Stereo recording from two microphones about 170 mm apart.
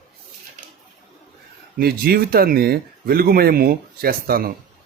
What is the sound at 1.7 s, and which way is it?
Speech, 65° right (ahead or behind).